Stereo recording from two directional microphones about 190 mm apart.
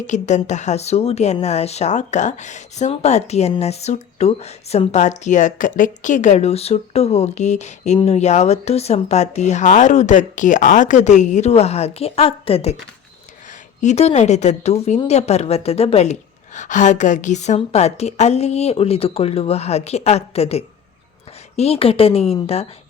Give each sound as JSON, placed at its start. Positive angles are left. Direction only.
{"t": 0.1, "sound": "speech", "side_deg": 40}
{"t": 13.8, "sound": "speech", "side_deg": 35}